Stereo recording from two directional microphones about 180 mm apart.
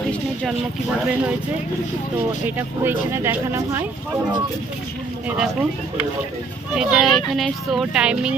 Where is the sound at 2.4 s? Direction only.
10° right (ahead or behind).